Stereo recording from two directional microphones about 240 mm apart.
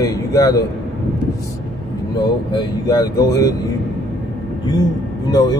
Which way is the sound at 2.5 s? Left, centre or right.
Centre.